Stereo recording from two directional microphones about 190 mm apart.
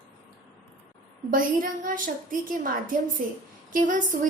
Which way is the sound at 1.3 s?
45° right (ahead or behind).